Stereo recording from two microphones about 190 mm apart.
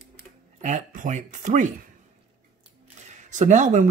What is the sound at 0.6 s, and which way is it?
Speech, 40° right (ahead or behind).